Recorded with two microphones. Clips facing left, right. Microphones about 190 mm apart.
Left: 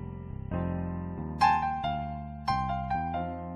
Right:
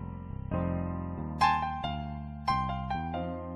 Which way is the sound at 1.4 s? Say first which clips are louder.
Left 4 dB; 45° left (ahead or behind).